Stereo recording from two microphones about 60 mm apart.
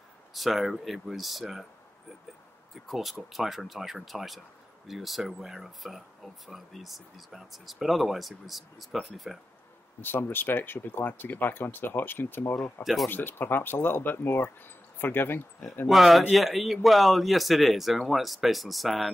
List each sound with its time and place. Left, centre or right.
0.3 s speech: centre
2.7 s speech: centre
10.0 s speech: left
12.8 s speech: centre
13.1 s speech: left
15.9 s speech: centre